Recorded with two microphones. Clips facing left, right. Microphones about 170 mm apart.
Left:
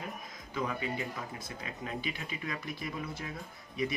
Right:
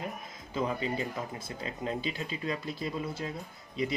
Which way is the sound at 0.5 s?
30° right (ahead or behind).